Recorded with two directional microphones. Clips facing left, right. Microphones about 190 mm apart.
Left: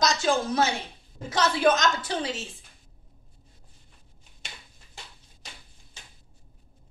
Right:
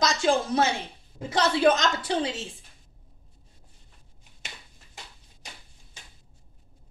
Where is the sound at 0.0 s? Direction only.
30° right (ahead or behind).